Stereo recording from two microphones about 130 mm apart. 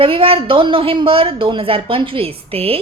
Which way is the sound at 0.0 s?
45° right (ahead or behind).